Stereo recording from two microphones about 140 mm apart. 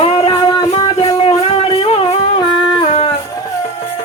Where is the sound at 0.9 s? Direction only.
50° left (ahead or behind).